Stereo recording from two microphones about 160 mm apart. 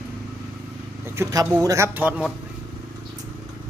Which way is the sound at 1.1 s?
20° right (ahead or behind).